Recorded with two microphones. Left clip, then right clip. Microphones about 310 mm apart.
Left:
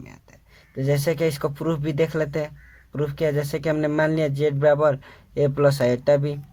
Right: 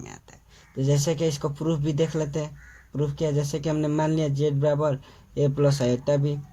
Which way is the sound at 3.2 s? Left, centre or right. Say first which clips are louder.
Left 4 dB; left.